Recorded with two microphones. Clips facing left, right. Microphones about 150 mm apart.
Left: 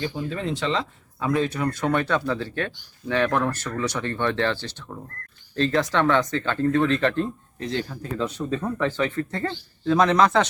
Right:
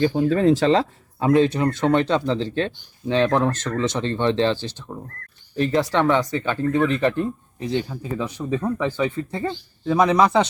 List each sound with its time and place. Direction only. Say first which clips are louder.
0.0 s speech: right 11 dB; 45° right (ahead or behind); by 10.4 s 10° right (ahead or behind)